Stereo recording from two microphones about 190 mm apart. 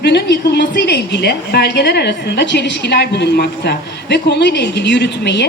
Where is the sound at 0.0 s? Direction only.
60° left (ahead or behind).